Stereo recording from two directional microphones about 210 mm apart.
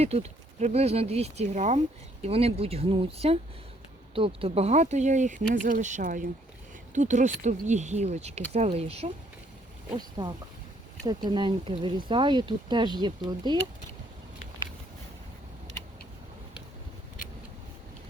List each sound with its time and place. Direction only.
0.0 s speech: 30° right (ahead or behind)
4.4 s speech: 30° right (ahead or behind)